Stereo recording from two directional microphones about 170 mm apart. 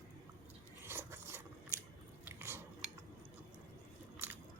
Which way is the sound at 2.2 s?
15° right (ahead or behind).